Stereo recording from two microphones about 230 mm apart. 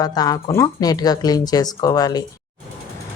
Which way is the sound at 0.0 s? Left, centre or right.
Centre.